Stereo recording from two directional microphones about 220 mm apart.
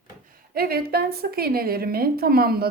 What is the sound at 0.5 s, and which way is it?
A woman's voice, 45° right (ahead or behind).